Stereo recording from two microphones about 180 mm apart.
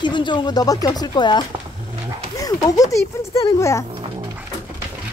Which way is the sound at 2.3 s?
20° left (ahead or behind).